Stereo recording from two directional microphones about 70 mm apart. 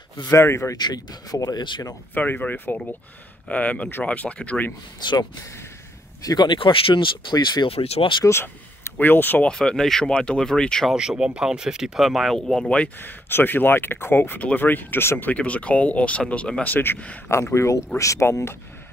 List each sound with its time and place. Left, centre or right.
0.3 s speech: left
0.7 s speech: left
2.1 s speech: left
6.2 s speech: left
7.3 s speech: left
8.2 s speech: left
9.4 s speech: centre
10.9 s speech: centre
13.0 s speech: left
16.6 s speech: left
17.3 s speech: left